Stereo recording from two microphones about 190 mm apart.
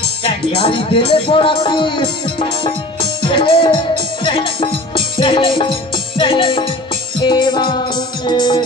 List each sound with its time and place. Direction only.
0.2 s speech: 30° left (ahead or behind)